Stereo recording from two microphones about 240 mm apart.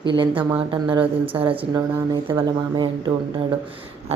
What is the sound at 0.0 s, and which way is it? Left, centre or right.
Speech, centre.